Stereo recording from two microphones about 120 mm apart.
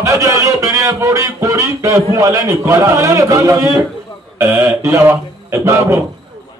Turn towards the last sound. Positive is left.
turn(degrees=-25)  # may be behind; listen again after turning